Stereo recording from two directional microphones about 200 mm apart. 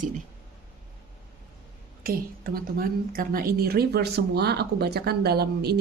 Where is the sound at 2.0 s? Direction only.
45° right (ahead or behind).